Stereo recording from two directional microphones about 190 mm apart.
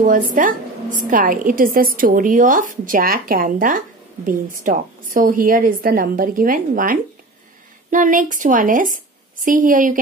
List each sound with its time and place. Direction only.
0.0 s a woman's voice: 45° right (ahead or behind)